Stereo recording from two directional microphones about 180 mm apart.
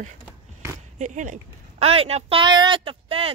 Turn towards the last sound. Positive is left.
turn(degrees=-30)  # may be behind; listen again after turning